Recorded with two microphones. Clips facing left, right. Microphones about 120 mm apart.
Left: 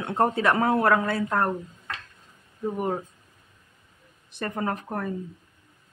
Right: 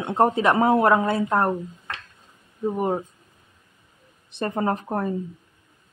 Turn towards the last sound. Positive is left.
turn(degrees=-25)  # may be behind; listen again after turning